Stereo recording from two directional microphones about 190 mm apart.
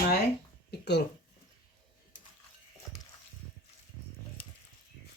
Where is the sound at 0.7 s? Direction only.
60° left (ahead or behind).